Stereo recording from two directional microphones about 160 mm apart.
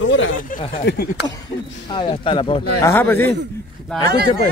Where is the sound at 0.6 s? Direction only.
35° left (ahead or behind).